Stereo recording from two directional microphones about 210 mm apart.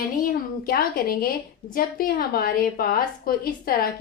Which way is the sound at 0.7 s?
45° left (ahead or behind).